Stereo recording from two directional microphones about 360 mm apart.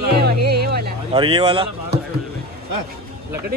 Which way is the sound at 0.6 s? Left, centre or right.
Right.